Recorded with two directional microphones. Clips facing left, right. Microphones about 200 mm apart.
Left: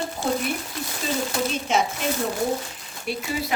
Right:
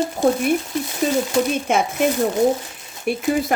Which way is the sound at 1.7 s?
55° right (ahead or behind).